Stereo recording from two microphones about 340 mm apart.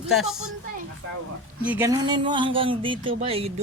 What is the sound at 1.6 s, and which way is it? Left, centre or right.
Speech, centre.